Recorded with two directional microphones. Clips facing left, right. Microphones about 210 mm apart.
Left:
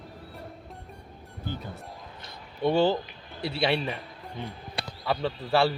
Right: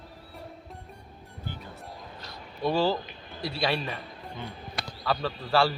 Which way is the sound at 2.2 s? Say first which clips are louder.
Left 3 dB; 20° left (ahead or behind).